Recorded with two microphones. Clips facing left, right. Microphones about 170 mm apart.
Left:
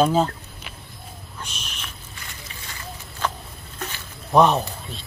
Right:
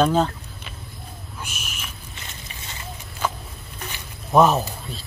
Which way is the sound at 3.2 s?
10° right (ahead or behind).